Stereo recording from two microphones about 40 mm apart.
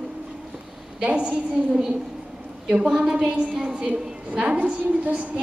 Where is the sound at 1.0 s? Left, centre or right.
Right.